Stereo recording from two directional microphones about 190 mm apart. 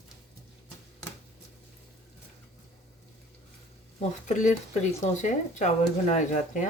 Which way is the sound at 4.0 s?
40° left (ahead or behind).